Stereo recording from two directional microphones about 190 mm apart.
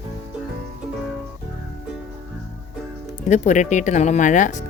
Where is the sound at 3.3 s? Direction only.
40° left (ahead or behind).